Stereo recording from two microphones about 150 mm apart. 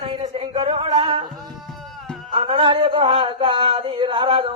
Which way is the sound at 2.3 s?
35° right (ahead or behind).